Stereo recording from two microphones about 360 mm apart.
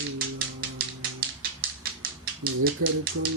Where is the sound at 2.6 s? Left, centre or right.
Right.